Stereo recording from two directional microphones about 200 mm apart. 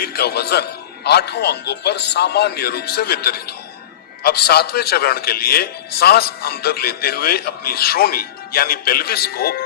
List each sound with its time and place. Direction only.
0.0 s a man's voice: 55° left (ahead or behind)